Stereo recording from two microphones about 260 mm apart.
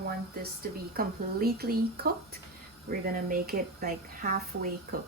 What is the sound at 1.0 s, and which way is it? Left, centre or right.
A woman's voice, right.